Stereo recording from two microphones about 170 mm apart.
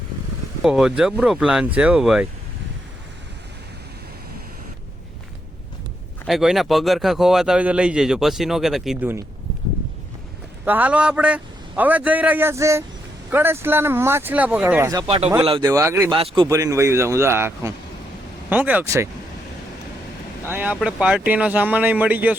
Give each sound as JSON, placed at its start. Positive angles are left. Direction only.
{"t": 0.6, "sound": "speech", "side_deg": -5}
{"t": 6.2, "sound": "speech", "side_deg": 0}
{"t": 10.7, "sound": "speech", "side_deg": -10}
{"t": 14.8, "sound": "speech", "side_deg": -25}
{"t": 16.1, "sound": "speech", "side_deg": -30}
{"t": 20.4, "sound": "speech", "side_deg": -10}